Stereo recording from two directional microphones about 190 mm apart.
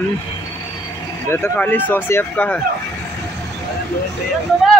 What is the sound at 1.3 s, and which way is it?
Speech, 10° left (ahead or behind).